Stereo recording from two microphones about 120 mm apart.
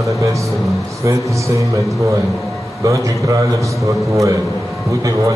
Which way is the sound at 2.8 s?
25° right (ahead or behind).